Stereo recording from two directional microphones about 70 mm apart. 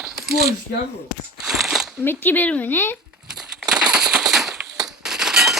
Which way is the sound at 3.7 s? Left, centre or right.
Centre.